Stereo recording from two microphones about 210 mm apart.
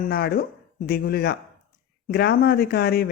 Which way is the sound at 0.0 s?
45° left (ahead or behind).